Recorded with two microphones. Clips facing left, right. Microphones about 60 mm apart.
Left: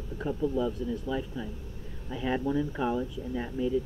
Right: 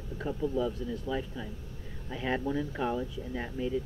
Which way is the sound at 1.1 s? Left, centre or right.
Centre.